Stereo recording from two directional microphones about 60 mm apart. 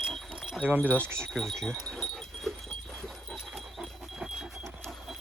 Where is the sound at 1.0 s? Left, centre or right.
Right.